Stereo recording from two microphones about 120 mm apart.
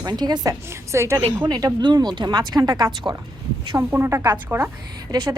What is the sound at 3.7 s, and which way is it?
Speech, 20° right (ahead or behind).